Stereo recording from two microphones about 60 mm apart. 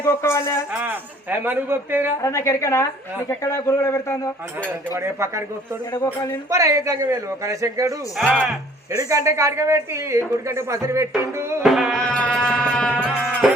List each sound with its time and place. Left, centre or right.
0.1 s a man's voice: left
0.8 s speech: right
2.2 s a man's voice: left
4.7 s speech: right
6.5 s a man's voice: right
11.6 s music: centre
11.9 s music: centre
12.9 s music: left
13.4 s music: centre